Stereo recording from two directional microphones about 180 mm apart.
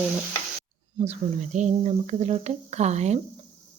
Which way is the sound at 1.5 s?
40° right (ahead or behind).